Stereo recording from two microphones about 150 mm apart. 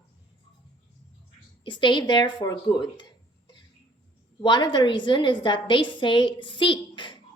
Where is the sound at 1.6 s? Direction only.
30° left (ahead or behind).